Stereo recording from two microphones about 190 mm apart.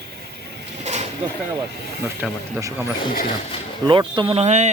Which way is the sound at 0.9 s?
35° right (ahead or behind).